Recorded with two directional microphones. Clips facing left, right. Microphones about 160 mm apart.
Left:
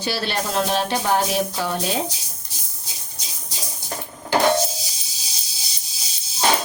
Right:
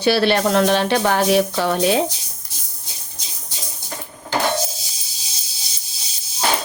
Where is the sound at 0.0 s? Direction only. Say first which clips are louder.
Right 9 dB; 70° right (ahead or behind).